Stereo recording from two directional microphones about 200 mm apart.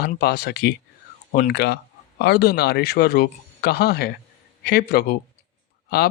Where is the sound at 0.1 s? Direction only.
50° left (ahead or behind).